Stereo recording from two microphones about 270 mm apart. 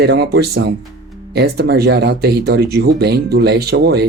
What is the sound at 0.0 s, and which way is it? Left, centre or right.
Speech, right.